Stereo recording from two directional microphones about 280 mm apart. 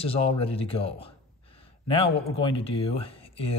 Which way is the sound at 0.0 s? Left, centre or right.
Centre.